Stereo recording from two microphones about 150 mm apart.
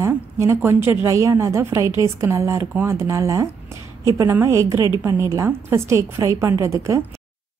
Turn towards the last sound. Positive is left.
turn(degrees=-20)  # may be behind; listen again after turning